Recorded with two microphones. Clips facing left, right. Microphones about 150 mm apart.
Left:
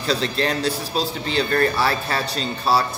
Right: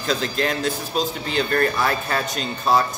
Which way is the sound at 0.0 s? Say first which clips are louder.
Left 1 dB; 35° left (ahead or behind).